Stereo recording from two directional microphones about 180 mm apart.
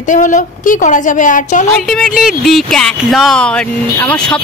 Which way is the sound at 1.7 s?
Centre (ahead or behind).